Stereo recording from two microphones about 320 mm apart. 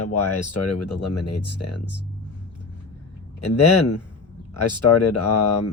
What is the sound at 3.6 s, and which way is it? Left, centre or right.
Speech, left.